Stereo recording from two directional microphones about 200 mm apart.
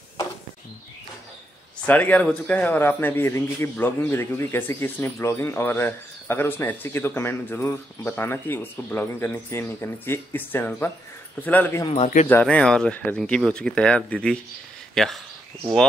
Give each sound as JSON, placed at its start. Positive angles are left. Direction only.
{"t": 1.9, "sound": "a man's voice", "side_deg": 5}
{"t": 11.9, "sound": "a man's voice", "side_deg": 35}
{"t": 12.3, "sound": "speech", "side_deg": 5}